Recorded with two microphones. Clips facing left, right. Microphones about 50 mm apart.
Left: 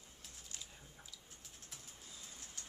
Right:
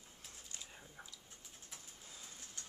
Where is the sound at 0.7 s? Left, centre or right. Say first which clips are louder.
Right 4 dB; right.